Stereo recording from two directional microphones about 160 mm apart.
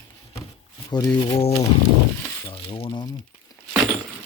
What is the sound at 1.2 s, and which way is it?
Speech, 35° left (ahead or behind).